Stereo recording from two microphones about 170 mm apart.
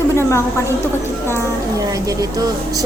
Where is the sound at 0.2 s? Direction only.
15° left (ahead or behind).